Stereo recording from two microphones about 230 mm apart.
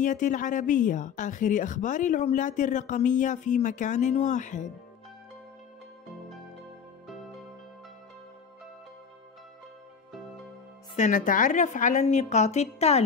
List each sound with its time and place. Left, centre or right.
0.0 s a woman's voice: left
11.0 s a woman's voice: left